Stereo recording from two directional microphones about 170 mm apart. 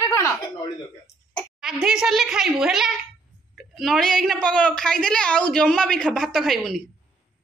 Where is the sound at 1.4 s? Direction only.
Centre (ahead or behind).